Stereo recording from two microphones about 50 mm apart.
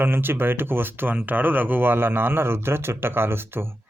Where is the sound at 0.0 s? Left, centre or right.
Right.